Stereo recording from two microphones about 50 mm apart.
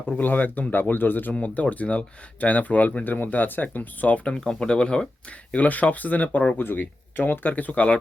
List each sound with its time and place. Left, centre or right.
0.2 s speech: left
1.3 s speech: left
4.4 s speech: centre
5.5 s speech: left
6.6 s speech: left